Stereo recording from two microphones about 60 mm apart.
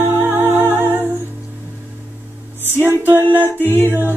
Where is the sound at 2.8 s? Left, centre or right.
Right.